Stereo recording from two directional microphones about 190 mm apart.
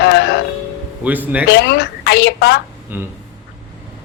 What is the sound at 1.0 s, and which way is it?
Speech, 10° right (ahead or behind).